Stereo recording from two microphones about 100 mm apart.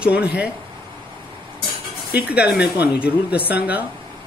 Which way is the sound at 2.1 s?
15° right (ahead or behind).